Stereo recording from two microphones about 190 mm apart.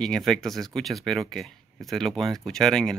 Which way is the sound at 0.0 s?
Centre (ahead or behind).